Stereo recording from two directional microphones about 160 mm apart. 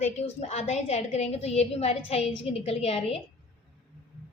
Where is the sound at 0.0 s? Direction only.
45° left (ahead or behind).